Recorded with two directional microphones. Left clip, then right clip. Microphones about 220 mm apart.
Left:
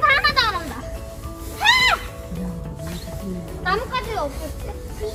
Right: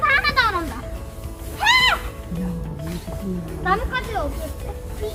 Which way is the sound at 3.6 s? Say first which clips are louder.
Right 1 dB; 25° left (ahead or behind).